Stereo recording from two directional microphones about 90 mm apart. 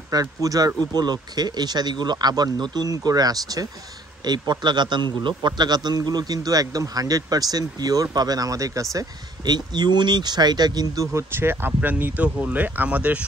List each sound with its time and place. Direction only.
0.1 s a man's voice: 45° right (ahead or behind)
9.5 s a man's voice: 55° right (ahead or behind)
11.1 s speech: 25° right (ahead or behind)